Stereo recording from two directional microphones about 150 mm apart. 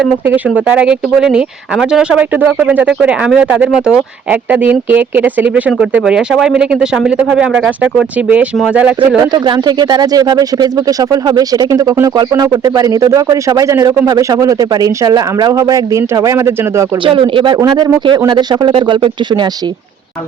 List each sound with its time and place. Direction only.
0.3 s speech: 10° right (ahead or behind)
9.3 s speech: 30° right (ahead or behind)
17.0 s speech: 35° right (ahead or behind)